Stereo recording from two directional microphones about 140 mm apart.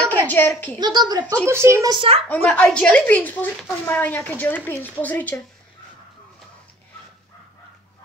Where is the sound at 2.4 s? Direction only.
10° left (ahead or behind).